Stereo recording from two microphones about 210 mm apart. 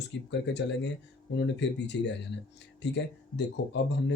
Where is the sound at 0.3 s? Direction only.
55° left (ahead or behind).